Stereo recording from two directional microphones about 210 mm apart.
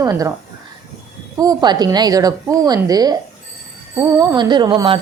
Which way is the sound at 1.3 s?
20° right (ahead or behind).